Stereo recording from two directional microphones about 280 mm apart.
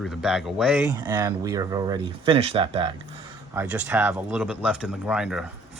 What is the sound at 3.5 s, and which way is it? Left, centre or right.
Speech, centre.